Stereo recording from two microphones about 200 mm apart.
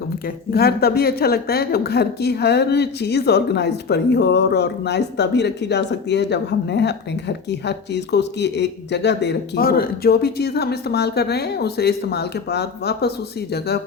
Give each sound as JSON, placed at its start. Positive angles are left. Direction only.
{"t": 0.5, "sound": "speech", "side_deg": 50}